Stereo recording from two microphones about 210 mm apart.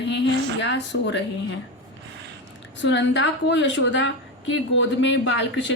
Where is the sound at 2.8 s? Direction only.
60° left (ahead or behind).